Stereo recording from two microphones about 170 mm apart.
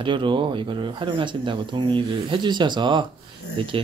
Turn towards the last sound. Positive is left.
turn(degrees=-30)  # may be behind; listen again after turning